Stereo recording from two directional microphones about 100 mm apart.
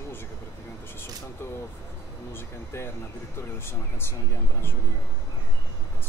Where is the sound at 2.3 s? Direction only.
25° left (ahead or behind).